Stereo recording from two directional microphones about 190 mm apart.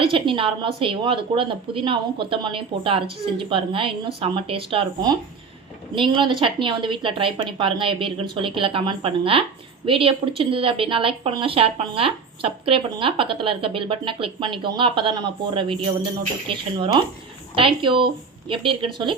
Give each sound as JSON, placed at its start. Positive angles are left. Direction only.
{"t": 0.0, "sound": "speech", "side_deg": -25}